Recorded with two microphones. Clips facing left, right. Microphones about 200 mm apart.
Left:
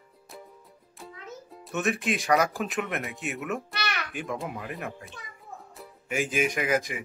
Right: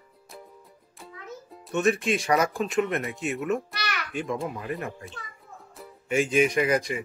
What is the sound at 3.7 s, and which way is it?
Babbling, 25° left (ahead or behind).